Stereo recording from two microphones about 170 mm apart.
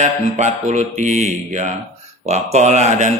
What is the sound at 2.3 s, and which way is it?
Speech, 40° right (ahead or behind).